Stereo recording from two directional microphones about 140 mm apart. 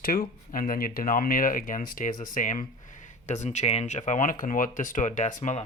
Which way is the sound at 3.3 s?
55° left (ahead or behind).